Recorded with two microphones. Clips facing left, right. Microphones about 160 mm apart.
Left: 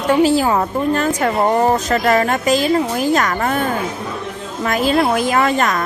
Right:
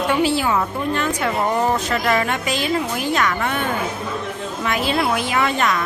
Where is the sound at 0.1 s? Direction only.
40° left (ahead or behind).